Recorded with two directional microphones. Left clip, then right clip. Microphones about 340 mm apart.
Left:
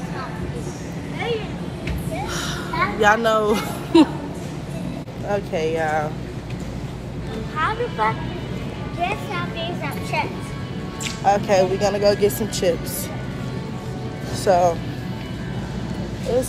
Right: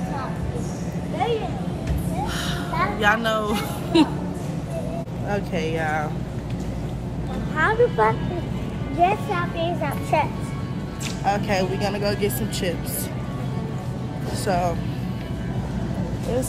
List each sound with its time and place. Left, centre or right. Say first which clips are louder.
3.0 s speech: left 5 dB; centre
5.3 s speech: left 4 dB; centre
7.5 s vehicle: right 4 dB; right
9.0 s a child's voice: right 4 dB; right
11.2 s speech: left 6 dB; centre
14.4 s speech: left 7 dB; centre